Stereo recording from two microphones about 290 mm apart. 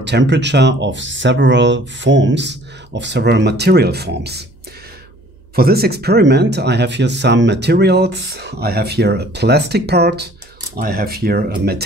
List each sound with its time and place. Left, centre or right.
0.0 s speech: right
5.6 s speech: right